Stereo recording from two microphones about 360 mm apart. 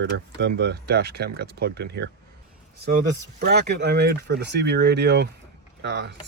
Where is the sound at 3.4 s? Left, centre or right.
Right.